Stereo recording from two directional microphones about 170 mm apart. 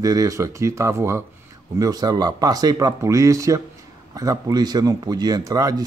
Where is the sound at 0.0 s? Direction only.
20° right (ahead or behind).